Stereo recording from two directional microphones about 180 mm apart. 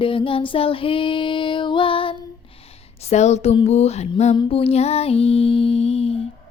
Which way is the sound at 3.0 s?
40° left (ahead or behind).